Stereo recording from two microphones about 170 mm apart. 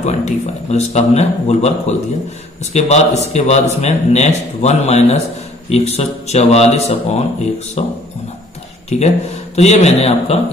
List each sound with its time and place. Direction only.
0.0 s a man's voice: 45° left (ahead or behind)
8.8 s a man's voice: 40° left (ahead or behind)